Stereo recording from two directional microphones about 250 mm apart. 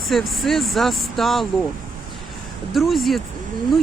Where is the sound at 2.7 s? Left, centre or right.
Centre.